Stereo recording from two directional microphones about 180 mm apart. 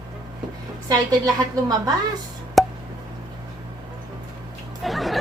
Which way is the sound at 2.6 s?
Centre (ahead or behind).